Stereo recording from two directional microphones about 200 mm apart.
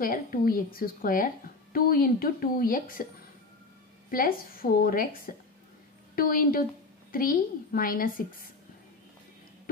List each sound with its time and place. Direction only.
0.0 s speech: 45° left (ahead or behind)
4.1 s speech: 45° left (ahead or behind)